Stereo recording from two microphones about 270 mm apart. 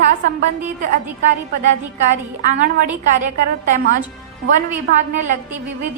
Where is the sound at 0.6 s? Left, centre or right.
Right.